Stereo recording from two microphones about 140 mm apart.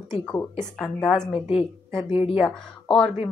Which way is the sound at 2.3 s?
5° left (ahead or behind).